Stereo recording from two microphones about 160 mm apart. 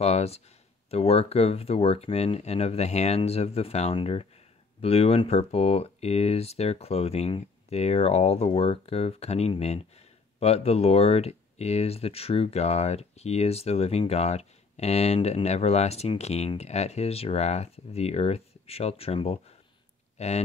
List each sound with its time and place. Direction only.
0.0 s speech: 40° left (ahead or behind)